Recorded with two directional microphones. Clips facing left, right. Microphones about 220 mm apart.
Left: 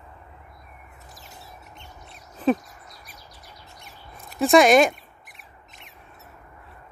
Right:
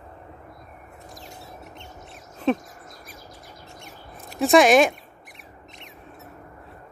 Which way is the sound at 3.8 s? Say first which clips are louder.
Right 3 dB; centre (ahead or behind).